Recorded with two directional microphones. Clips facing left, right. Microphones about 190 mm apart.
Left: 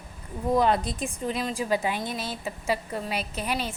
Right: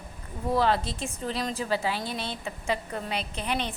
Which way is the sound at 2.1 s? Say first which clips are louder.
Left 1 dB; 5° left (ahead or behind).